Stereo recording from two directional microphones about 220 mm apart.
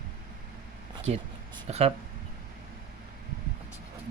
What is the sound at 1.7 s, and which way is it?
Speech, 30° right (ahead or behind).